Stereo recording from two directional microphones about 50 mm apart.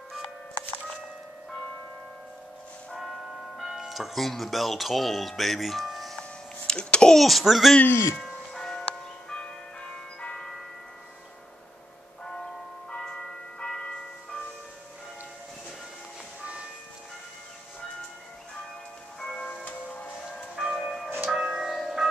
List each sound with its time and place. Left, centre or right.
3.5 s speech: centre
6.7 s a sound: centre
7.2 s speech: centre
8.5 s church bell: centre
8.8 s church bell: centre
12.3 s church bell: centre
19.1 s bell: centre
19.6 s music: left
20.5 s church bell: centre
21.3 s church bell: centre
21.7 s tubular bells: centre